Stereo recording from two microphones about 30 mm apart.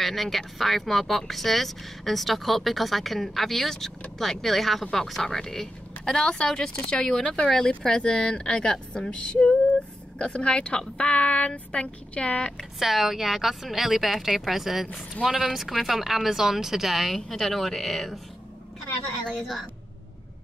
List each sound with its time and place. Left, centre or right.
0.0 s a woman's voice: centre
8.0 s speech: left
12.7 s speech: centre
17.3 s speech: centre